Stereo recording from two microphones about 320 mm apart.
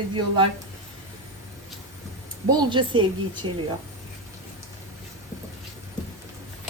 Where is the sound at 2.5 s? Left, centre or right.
Centre.